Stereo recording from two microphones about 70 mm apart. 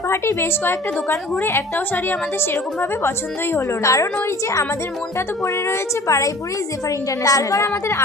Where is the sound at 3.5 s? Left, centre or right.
Left.